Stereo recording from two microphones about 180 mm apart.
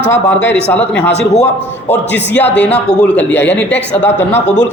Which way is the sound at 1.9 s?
10° left (ahead or behind).